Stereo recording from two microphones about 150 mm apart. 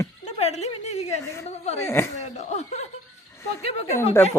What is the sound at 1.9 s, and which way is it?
Speech, 15° left (ahead or behind).